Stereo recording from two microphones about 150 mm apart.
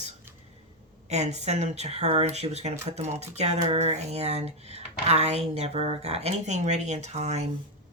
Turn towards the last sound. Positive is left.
turn(degrees=-50)  # may be behind; listen again after turning